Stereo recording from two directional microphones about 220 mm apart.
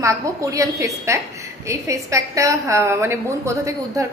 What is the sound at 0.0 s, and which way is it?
A woman's voice, 15° right (ahead or behind).